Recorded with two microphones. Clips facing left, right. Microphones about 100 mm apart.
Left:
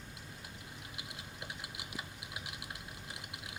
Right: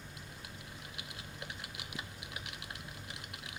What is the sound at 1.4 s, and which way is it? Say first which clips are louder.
Typing: even; 20° left (ahead or behind).